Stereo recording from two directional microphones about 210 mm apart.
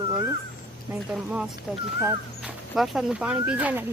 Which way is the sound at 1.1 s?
5° right (ahead or behind).